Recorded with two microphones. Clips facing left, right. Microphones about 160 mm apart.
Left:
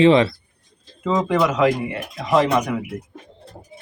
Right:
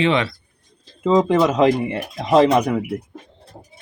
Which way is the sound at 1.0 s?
20° right (ahead or behind).